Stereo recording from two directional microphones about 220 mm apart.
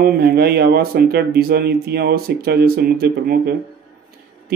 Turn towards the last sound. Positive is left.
turn(degrees=-45)  # may be behind; listen again after turning